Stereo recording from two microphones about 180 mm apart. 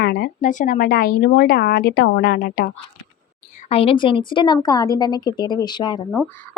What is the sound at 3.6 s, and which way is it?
A woman's voice, 30° left (ahead or behind).